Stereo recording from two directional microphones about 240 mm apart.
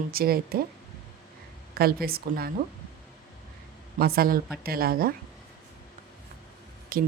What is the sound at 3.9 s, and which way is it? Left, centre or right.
Speech, right.